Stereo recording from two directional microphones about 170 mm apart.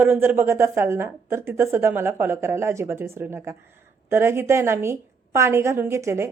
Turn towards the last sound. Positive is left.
turn(degrees=-15)  # may be behind; listen again after turning